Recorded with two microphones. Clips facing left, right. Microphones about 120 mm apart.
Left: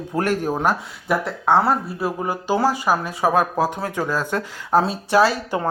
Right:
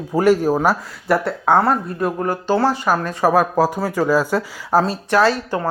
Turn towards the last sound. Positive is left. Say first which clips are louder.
# right 1 dB
turn(degrees=10)  # may be behind; listen again after turning